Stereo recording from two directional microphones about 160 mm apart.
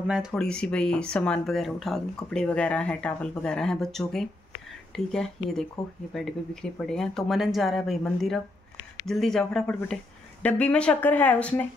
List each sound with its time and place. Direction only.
0.0 s speech: 5° right (ahead or behind)